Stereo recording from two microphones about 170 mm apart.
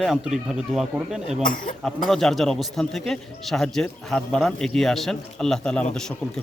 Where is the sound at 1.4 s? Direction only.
55° left (ahead or behind).